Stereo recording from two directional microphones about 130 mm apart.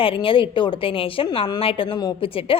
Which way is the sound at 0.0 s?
45° left (ahead or behind).